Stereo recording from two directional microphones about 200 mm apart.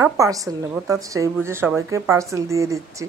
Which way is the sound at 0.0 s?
15° right (ahead or behind).